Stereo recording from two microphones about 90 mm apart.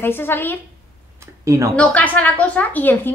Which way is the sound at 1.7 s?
20° left (ahead or behind).